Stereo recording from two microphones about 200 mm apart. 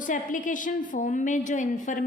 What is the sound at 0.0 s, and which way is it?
A woman's voice, 40° left (ahead or behind).